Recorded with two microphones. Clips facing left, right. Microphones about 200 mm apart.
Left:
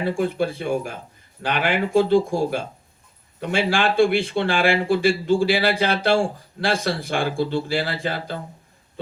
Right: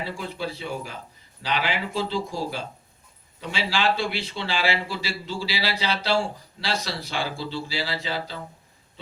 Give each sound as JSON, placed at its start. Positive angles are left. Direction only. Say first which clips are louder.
{"t": 0.0, "sound": "speech", "louder": "left 9 dB", "side_deg": 55}